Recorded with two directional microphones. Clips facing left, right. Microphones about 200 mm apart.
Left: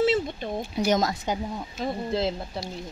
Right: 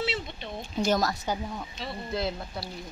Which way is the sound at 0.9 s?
20° left (ahead or behind).